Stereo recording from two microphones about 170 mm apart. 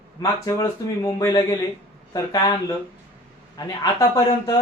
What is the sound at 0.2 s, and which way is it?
Speech, 20° left (ahead or behind).